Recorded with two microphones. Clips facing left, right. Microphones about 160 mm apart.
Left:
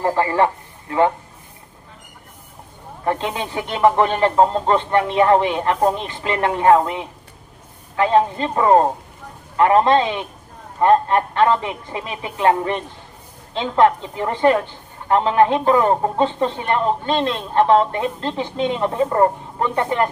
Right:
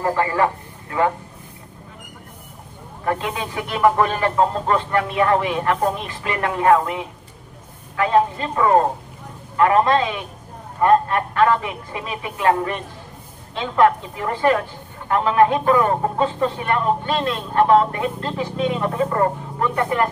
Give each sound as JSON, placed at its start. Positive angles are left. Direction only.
{"t": 0.0, "sound": "a man's voice", "side_deg": 30}
{"t": 3.1, "sound": "speech", "side_deg": 30}